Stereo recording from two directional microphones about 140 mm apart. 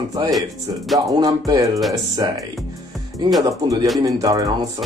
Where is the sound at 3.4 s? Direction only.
25° right (ahead or behind).